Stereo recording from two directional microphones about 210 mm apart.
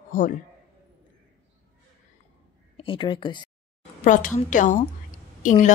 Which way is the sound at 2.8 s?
25° left (ahead or behind).